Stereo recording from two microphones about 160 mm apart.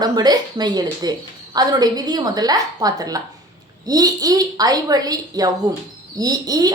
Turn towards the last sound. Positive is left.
turn(degrees=-25)  # may be behind; listen again after turning